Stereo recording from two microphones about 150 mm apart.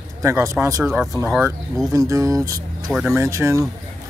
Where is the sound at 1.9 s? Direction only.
20° right (ahead or behind).